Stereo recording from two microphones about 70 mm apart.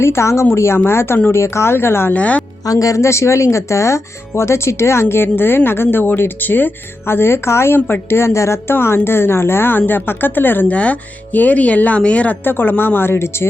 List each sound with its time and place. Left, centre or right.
0.0 s speech: left
2.1 s speech: centre
2.6 s speech: left